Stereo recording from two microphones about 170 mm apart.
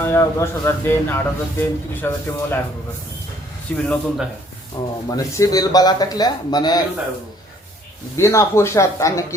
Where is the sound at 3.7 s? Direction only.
10° left (ahead or behind).